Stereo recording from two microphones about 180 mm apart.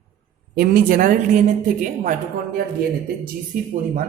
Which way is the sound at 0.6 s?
50° right (ahead or behind).